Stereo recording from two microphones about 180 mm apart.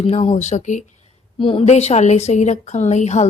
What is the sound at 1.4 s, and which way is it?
A woman's voice, 30° left (ahead or behind).